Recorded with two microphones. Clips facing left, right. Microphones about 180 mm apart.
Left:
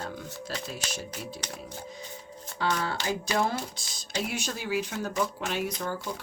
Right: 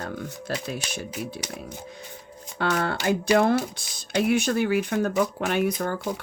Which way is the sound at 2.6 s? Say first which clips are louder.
Right 5 dB; 60° right (ahead or behind).